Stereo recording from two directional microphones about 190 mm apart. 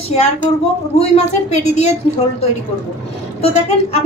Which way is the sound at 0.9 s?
35° left (ahead or behind).